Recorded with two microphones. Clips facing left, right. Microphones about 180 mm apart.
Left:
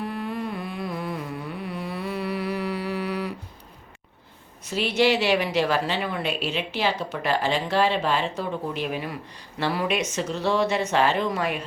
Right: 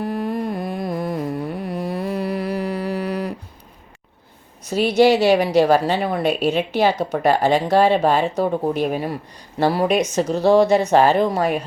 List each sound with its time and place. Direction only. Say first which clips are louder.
0.0 s music: right 6 dB; 40° right (ahead or behind)
4.7 s a woman's voice: right 7 dB; 40° right (ahead or behind)